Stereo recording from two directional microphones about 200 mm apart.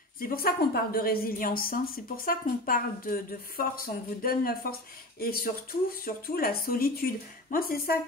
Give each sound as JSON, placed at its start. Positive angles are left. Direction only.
{"t": 0.2, "sound": "a woman's voice", "side_deg": 50}